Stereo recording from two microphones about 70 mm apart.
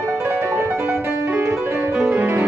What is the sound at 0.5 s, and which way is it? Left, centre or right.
Music, right.